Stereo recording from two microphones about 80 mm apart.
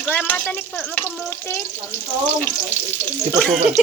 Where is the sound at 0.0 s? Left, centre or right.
Left.